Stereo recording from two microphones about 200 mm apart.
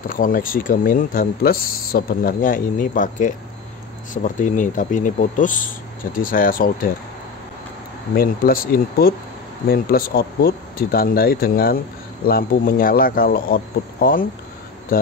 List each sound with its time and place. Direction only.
0.1 s speech: 45° left (ahead or behind)
8.1 s speech: 45° left (ahead or behind)